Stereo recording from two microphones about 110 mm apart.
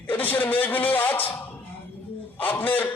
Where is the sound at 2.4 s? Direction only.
15° left (ahead or behind).